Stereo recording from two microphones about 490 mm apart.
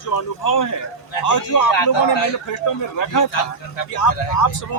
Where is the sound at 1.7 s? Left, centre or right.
Left.